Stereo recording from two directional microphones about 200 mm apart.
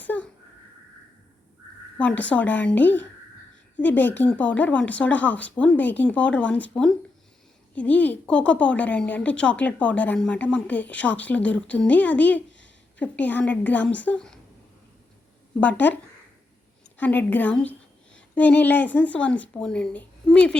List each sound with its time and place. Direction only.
0.0 s a sound: 10° left (ahead or behind)
2.0 s a woman's voice: 5° left (ahead or behind)
15.6 s a woman's voice: 10° left (ahead or behind)
17.0 s a woman's voice: 10° left (ahead or behind)